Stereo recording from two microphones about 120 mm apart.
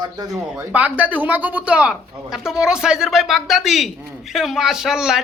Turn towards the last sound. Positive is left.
turn(degrees=-5)  # may be behind; listen again after turning